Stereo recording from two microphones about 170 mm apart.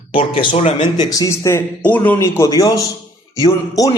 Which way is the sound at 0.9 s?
20° left (ahead or behind).